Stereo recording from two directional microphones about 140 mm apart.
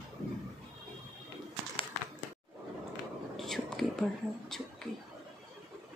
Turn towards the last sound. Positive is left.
turn(degrees=5)  # may be behind; listen again after turning